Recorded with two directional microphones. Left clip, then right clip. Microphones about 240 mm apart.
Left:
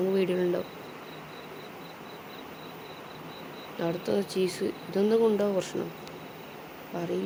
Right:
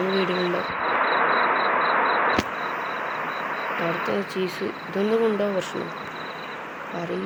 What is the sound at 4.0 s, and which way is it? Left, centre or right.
Speech, centre.